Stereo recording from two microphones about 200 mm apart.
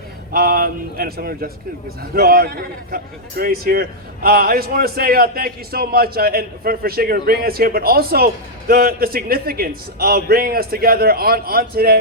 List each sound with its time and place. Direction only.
0.3 s a man's voice: 50° right (ahead or behind)